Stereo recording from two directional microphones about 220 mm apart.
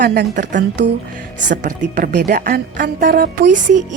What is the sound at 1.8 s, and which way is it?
A woman's voice, 50° right (ahead or behind).